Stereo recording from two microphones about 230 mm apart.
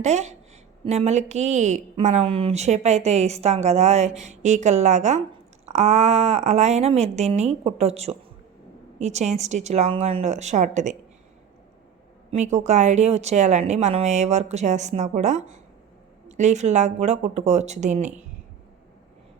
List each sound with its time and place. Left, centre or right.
0.0 s a woman's voice: right
12.3 s a woman's voice: right